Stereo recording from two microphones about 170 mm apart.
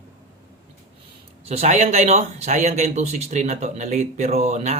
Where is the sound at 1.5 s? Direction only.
40° right (ahead or behind).